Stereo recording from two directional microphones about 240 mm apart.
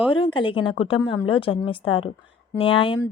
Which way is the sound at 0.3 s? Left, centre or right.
Left.